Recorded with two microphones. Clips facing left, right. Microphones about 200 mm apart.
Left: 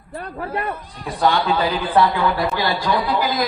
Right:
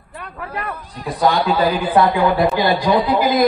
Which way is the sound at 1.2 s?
40° right (ahead or behind).